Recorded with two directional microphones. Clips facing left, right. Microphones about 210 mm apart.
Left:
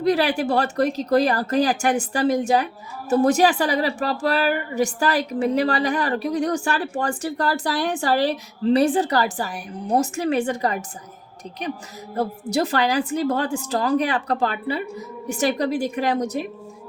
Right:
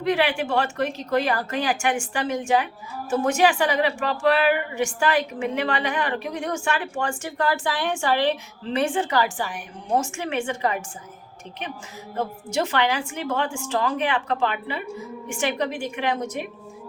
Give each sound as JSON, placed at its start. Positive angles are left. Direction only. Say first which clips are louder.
{"t": 0.0, "sound": "a woman's voice", "louder": "left 3 dB", "side_deg": 40}
{"t": 12.1, "sound": "a woman's voice", "louder": "left 3 dB", "side_deg": 35}